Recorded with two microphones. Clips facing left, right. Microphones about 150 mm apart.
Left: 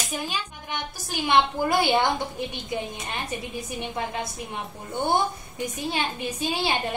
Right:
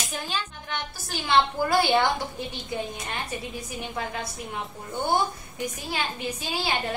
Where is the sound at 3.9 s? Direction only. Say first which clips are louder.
Left 1 dB; 20° left (ahead or behind).